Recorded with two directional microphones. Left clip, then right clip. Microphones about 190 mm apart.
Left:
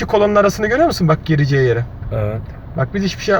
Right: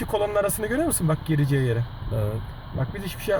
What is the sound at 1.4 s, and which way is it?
Speech, 65° right (ahead or behind).